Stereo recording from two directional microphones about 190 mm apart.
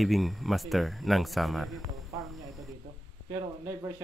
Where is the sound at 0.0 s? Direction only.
Centre (ahead or behind).